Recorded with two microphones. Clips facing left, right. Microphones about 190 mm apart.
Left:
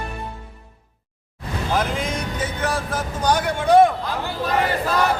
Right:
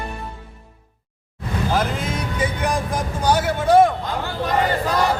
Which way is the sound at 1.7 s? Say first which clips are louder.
Left 1 dB; centre (ahead or behind).